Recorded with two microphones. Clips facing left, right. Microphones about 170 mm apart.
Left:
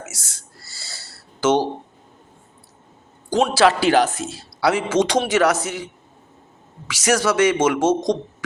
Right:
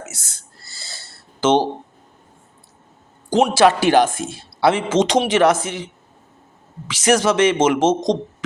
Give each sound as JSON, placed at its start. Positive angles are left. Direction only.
{"t": 1.1, "sound": "a sound", "side_deg": -25}
{"t": 3.3, "sound": "speech", "side_deg": -20}
{"t": 6.8, "sound": "speech", "side_deg": -25}